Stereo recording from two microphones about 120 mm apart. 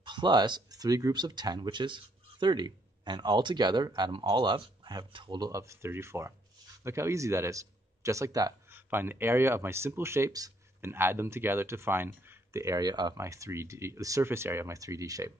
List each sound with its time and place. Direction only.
0.0 s a man's voice: 40° right (ahead or behind)
8.7 s speech: 20° right (ahead or behind)